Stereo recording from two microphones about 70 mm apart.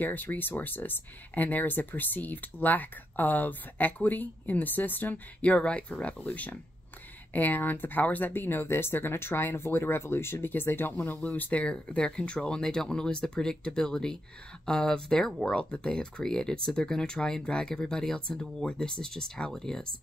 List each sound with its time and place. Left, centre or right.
0.0 s speech: left; by 19.9 s centre